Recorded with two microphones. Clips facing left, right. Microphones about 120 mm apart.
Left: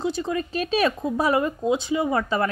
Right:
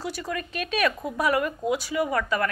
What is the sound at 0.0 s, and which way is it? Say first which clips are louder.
A woman's voice: left 6 dB; 25° left (ahead or behind).